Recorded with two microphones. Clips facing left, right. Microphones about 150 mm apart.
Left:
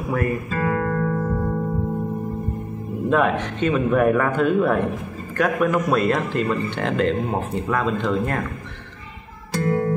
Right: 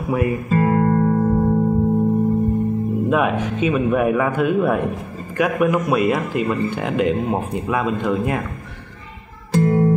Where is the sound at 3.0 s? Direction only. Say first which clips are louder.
Left 2 dB; 10° right (ahead or behind).